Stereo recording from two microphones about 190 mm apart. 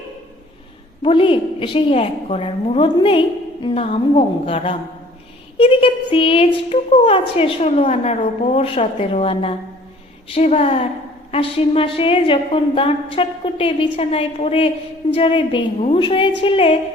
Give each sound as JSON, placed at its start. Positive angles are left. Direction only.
{"t": 1.0, "sound": "a woman's voice", "side_deg": 25}